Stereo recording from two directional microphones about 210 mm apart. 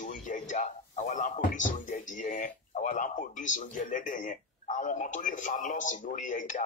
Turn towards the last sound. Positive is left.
turn(degrees=40)  # may be behind; listen again after turning